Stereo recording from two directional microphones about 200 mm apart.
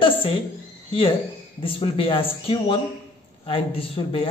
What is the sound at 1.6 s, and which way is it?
A man's voice, 25° left (ahead or behind).